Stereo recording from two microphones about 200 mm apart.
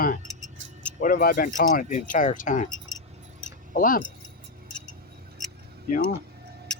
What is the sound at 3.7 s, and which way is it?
Speech, 45° left (ahead or behind).